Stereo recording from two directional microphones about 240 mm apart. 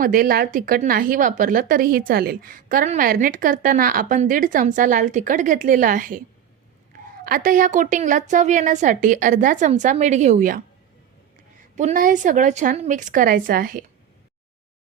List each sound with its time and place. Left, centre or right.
0.0 s speech: right
11.8 s speech: right